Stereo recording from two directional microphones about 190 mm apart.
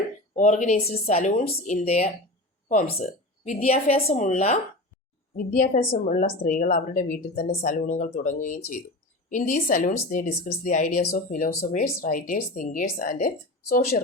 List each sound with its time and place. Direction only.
0.3 s a woman's voice: 40° left (ahead or behind)